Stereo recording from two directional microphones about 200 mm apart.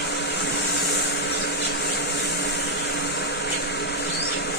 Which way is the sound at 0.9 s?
60° left (ahead or behind).